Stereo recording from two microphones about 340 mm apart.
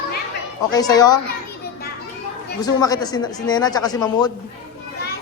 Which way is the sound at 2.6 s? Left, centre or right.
Centre.